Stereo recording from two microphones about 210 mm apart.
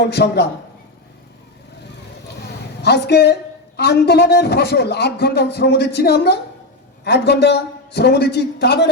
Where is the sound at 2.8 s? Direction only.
50° left (ahead or behind).